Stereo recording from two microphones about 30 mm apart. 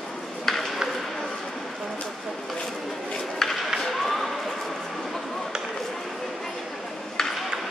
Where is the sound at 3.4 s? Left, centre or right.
Centre.